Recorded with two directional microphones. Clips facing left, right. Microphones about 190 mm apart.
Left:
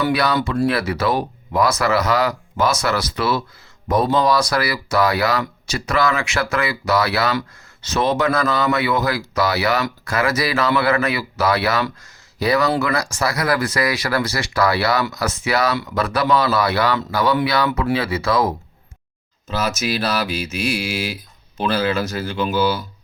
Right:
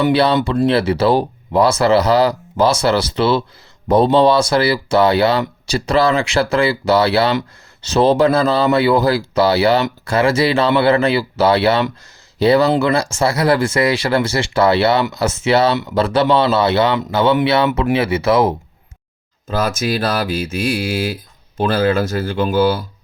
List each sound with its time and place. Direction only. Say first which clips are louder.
0.0 s speech: right 5 dB; 30° right (ahead or behind)
19.5 s speech: right 4 dB; 50° right (ahead or behind)